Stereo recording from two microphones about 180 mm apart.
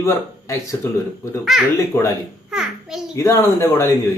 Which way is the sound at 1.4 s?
Centre (ahead or behind).